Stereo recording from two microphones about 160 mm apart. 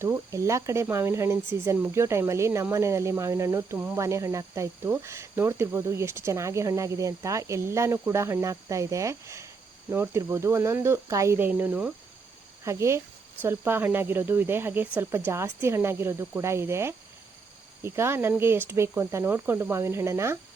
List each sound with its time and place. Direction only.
0.0 s speech: 15° right (ahead or behind)